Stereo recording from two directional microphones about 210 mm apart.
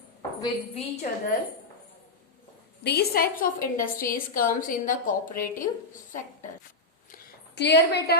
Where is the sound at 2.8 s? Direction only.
50° left (ahead or behind).